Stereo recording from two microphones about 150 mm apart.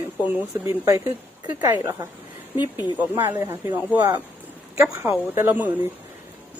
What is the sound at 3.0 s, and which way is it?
Speech, 15° right (ahead or behind).